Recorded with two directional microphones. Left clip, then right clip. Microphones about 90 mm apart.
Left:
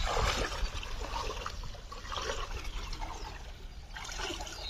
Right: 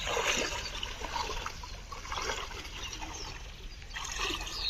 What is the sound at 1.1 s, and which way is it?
Water, 35° right (ahead or behind).